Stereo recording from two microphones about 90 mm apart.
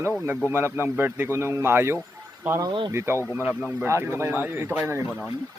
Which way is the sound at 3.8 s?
30° right (ahead or behind).